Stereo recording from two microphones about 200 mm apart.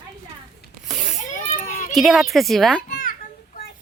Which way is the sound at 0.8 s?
Centre (ahead or behind).